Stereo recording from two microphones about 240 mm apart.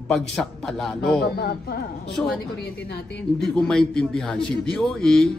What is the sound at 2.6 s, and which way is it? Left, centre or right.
Speech, left.